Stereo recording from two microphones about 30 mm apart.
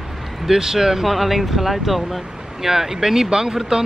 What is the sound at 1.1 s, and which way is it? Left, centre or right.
Speech, centre.